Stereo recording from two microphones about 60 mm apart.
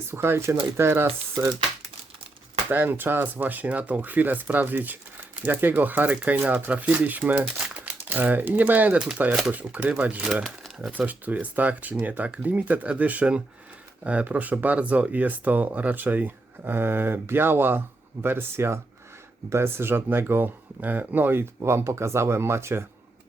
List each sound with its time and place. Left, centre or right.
0.1 s speech: right
2.6 s speech: right